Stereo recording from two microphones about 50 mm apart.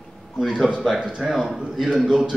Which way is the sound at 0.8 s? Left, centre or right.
Centre.